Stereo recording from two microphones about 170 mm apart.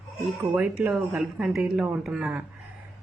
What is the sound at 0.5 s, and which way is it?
A man's voice, 5° right (ahead or behind).